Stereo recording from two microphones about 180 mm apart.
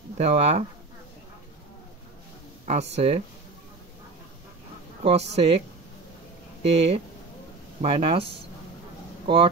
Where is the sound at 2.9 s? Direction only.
35° right (ahead or behind).